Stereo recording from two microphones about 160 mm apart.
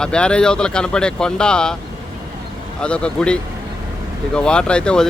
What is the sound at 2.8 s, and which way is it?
Speech, 5° left (ahead or behind).